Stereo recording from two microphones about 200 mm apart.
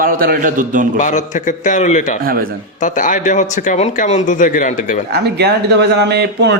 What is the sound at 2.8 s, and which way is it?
Speech, 40° left (ahead or behind).